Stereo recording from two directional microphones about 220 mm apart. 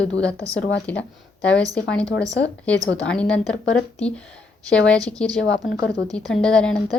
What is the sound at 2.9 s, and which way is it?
Speech, 5° left (ahead or behind).